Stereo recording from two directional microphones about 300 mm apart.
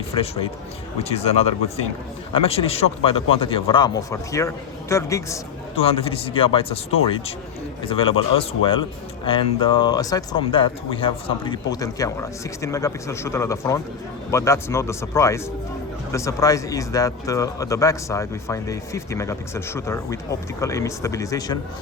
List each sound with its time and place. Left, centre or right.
0.1 s speech: centre